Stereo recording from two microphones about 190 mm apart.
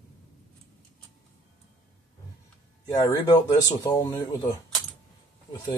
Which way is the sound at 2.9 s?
20° left (ahead or behind).